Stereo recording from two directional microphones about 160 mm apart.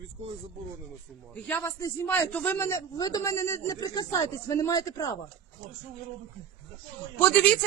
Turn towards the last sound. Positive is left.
turn(degrees=10)  # may be behind; listen again after turning